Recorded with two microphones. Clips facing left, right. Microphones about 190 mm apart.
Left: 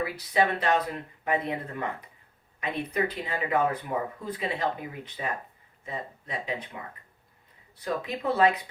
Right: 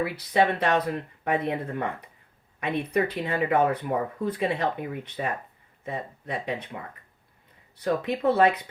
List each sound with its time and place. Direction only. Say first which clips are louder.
0.0 s speech: right 3 dB; 60° right (ahead or behind)
8.0 s speech: right 3 dB; 55° right (ahead or behind)